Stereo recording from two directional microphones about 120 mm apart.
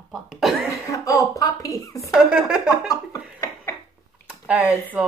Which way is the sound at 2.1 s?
5° right (ahead or behind).